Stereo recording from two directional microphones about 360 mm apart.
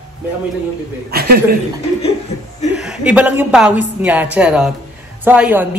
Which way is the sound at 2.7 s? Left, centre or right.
Centre.